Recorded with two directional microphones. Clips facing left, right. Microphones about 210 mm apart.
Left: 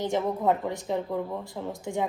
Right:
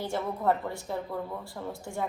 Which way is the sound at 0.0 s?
20° left (ahead or behind).